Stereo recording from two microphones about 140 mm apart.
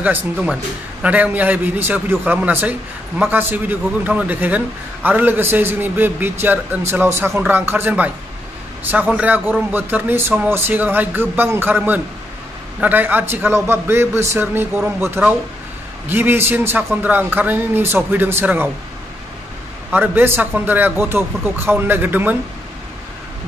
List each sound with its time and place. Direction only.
0.0 s a man's voice: 10° right (ahead or behind)
19.9 s a man's voice: 15° right (ahead or behind)